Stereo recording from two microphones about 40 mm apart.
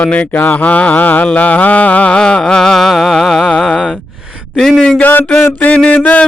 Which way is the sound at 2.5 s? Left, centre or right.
Centre.